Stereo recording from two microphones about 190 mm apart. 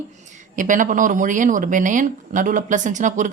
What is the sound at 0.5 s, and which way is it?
Speech, 45° right (ahead or behind).